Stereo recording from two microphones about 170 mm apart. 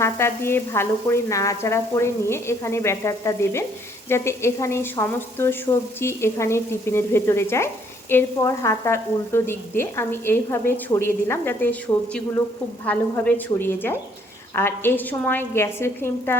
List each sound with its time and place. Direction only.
0.0 s speech: 15° left (ahead or behind)